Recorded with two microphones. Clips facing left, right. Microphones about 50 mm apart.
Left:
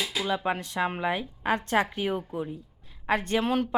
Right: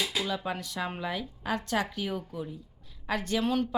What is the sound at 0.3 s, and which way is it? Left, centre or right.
A woman's voice, left.